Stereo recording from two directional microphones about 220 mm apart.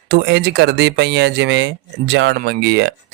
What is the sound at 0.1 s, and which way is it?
Speech, 50° right (ahead or behind).